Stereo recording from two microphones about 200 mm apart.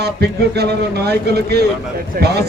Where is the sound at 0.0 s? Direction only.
55° right (ahead or behind).